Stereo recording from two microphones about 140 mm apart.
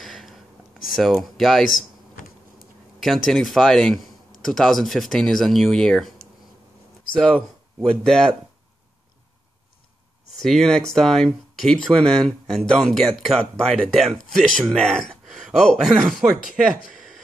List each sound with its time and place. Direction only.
0.0 s a sound: centre (ahead or behind)
0.8 s speech: centre (ahead or behind)
1.8 s computer keyboard: 80° left
3.0 s speech: centre (ahead or behind)
7.2 s speech: 10° left (ahead or behind)
10.3 s speech: centre (ahead or behind)